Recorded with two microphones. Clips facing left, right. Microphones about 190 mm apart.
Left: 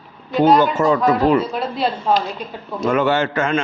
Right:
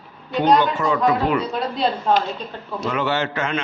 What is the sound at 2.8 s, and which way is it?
Speech, 50° left (ahead or behind).